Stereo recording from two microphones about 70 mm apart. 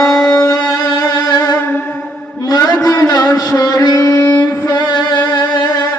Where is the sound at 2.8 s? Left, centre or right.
Left.